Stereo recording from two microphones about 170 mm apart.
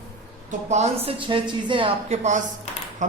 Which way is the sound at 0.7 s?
40° right (ahead or behind).